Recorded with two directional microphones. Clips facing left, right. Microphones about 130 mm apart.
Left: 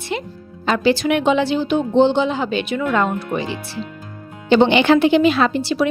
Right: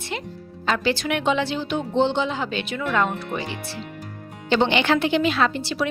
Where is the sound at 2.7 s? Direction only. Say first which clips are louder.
Left 3 dB; 25° left (ahead or behind).